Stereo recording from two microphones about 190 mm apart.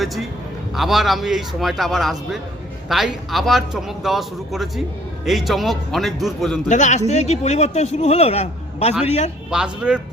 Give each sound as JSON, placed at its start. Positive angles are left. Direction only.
{"t": 0.0, "sound": "a man's voice", "side_deg": 0}
{"t": 6.7, "sound": "a man's voice", "side_deg": 40}
{"t": 9.5, "sound": "a man's voice", "side_deg": -5}